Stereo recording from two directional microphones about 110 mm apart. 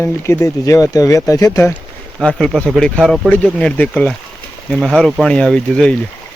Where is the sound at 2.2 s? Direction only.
5° left (ahead or behind).